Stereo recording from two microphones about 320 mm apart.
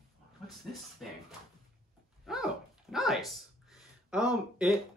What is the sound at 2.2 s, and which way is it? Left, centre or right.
Speech, centre.